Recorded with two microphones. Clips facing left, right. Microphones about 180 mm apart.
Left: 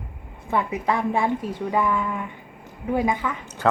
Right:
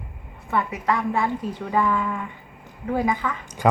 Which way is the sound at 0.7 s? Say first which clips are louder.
Left 1 dB; 25° left (ahead or behind).